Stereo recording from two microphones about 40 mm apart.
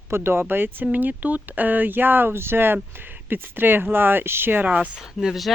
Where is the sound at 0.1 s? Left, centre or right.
Right.